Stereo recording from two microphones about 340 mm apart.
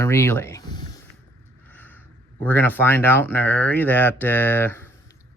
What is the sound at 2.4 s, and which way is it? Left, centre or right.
Speech, centre.